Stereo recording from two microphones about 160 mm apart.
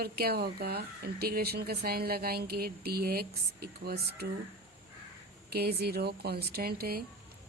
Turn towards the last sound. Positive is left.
turn(degrees=-70)  # may be behind; listen again after turning